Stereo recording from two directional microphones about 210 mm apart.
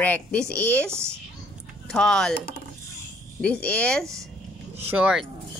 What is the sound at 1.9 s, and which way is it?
Speech, 5° left (ahead or behind).